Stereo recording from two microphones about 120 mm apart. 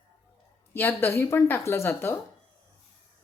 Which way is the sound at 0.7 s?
15° left (ahead or behind).